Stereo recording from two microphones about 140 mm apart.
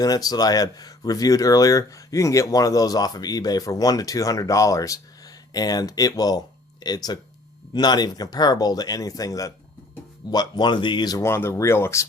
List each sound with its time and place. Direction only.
0.0 s speech: 25° left (ahead or behind)